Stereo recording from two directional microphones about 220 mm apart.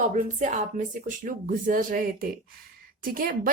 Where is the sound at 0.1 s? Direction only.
35° right (ahead or behind).